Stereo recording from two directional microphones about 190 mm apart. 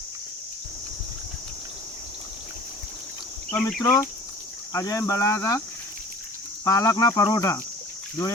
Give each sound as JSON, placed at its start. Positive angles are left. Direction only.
{"t": 3.5, "sound": "speech", "side_deg": 0}
{"t": 4.7, "sound": "speech", "side_deg": 15}
{"t": 6.7, "sound": "speech", "side_deg": 20}